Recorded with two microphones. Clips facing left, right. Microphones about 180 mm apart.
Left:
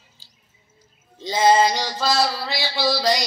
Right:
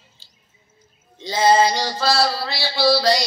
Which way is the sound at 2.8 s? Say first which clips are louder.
Right 4 dB; 15° left (ahead or behind).